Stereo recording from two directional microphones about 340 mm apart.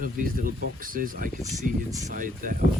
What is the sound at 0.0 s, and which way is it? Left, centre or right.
Speech, right.